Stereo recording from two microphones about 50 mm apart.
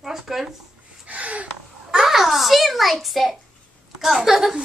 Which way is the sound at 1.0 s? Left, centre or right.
Right.